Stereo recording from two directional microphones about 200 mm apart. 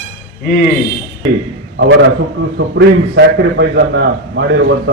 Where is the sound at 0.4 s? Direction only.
40° left (ahead or behind).